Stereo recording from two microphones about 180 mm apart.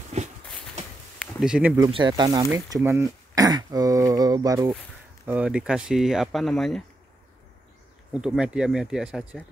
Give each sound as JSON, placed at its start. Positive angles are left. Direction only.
{"t": 0.2, "sound": "a sound", "side_deg": -35}
{"t": 1.2, "sound": "speech", "side_deg": -5}
{"t": 1.9, "sound": "speech", "side_deg": -25}
{"t": 5.2, "sound": "speech", "side_deg": -5}
{"t": 8.1, "sound": "speech", "side_deg": -5}